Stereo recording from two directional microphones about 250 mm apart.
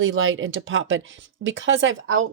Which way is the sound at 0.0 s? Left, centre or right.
Right.